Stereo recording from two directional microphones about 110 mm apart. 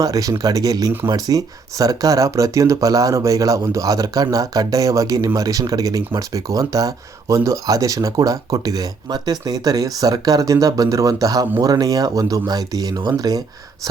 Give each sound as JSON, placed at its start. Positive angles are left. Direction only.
{"t": 0.0, "sound": "speech", "side_deg": -30}